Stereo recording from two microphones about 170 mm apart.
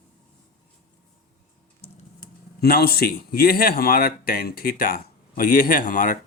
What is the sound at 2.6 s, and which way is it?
Speech, 65° left (ahead or behind).